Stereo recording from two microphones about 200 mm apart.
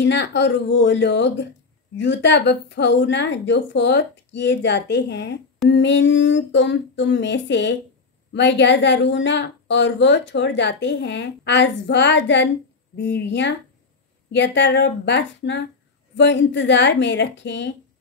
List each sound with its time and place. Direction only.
0.0 s a woman's voice: 60° left (ahead or behind)